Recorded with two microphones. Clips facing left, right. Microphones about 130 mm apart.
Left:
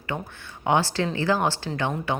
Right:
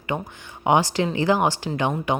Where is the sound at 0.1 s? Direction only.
15° right (ahead or behind).